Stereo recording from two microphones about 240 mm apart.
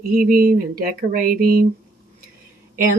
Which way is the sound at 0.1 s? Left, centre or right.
Right.